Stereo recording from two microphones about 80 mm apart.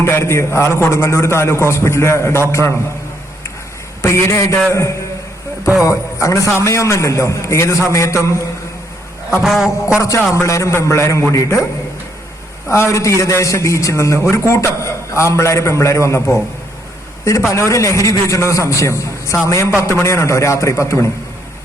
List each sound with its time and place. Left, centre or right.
0.0 s a man's voice: left
4.0 s a man's voice: left
9.3 s a sound: centre
10.0 s a man's voice: left
12.6 s a man's voice: left
17.5 s a man's voice: left